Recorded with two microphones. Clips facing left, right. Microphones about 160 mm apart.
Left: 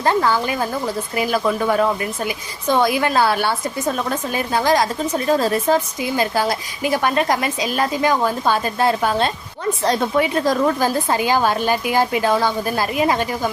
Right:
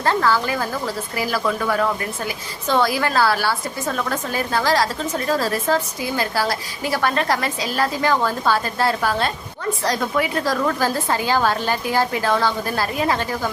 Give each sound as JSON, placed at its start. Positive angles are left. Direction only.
{"t": 0.0, "sound": "a woman's voice", "side_deg": 20}